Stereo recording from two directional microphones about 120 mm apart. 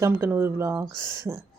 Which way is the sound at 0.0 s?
20° right (ahead or behind).